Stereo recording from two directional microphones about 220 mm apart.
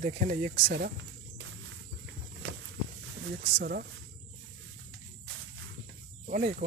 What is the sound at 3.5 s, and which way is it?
Speech, 45° right (ahead or behind).